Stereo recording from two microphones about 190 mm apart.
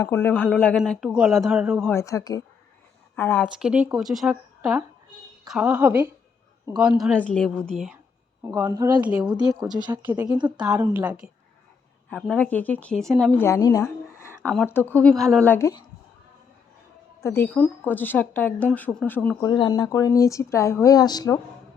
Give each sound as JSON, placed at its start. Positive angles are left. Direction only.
{"t": 0.0, "sound": "a woman's voice", "side_deg": 10}
{"t": 1.9, "sound": "speech", "side_deg": 15}
{"t": 3.4, "sound": "a woman's voice", "side_deg": -5}
{"t": 8.7, "sound": "a woman's voice", "side_deg": -20}
{"t": 9.8, "sound": "a woman's voice", "side_deg": -10}
{"t": 12.1, "sound": "speech", "side_deg": 5}
{"t": 13.4, "sound": "speech", "side_deg": 15}
{"t": 14.2, "sound": "a sound", "side_deg": 15}
{"t": 14.5, "sound": "speech", "side_deg": 5}
{"t": 17.2, "sound": "speech", "side_deg": 10}
{"t": 19.5, "sound": "speech", "side_deg": 20}